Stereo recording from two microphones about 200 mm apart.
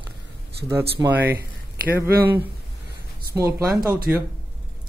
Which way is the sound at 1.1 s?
10° right (ahead or behind).